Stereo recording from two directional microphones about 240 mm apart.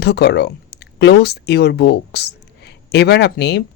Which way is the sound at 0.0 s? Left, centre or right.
Left.